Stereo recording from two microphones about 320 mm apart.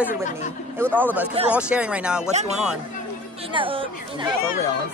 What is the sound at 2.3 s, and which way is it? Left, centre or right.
Speech, right.